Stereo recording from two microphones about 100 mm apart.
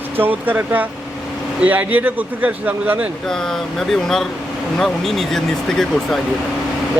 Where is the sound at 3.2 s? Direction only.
5° left (ahead or behind).